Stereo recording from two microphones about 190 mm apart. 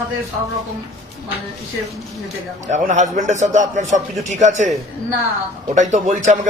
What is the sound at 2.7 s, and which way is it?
A man's voice, 40° right (ahead or behind).